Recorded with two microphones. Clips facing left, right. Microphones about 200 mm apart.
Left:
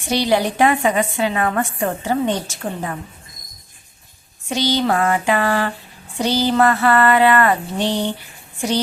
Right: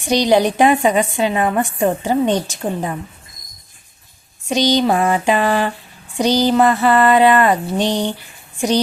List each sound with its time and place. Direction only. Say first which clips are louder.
0.1 s a woman's voice: right 4 dB; 15° right (ahead or behind)
4.4 s a woman's voice: right 4 dB; 15° right (ahead or behind)